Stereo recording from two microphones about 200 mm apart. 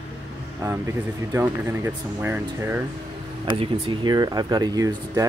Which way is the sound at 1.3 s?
10° right (ahead or behind).